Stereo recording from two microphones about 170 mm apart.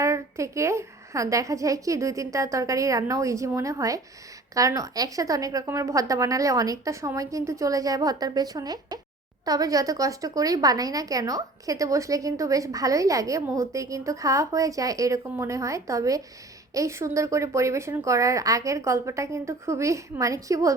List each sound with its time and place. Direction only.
0.0 s a woman's voice: 15° right (ahead or behind)